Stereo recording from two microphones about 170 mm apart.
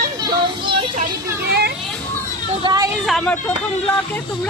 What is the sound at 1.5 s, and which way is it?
Speech, 70° right (ahead or behind).